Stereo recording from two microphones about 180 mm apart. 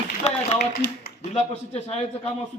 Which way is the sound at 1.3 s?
35° left (ahead or behind).